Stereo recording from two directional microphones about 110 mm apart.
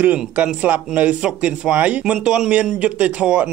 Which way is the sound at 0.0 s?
15° right (ahead or behind).